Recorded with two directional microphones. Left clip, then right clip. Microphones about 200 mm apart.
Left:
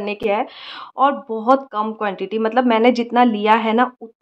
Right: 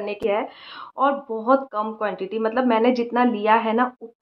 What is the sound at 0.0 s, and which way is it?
Speech, 40° left (ahead or behind).